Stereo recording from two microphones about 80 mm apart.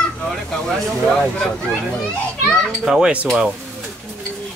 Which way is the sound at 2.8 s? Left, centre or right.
Centre.